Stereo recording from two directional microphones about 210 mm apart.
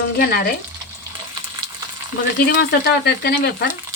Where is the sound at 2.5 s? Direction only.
50° left (ahead or behind).